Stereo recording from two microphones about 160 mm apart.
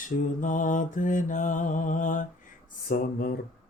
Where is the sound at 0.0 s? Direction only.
55° left (ahead or behind).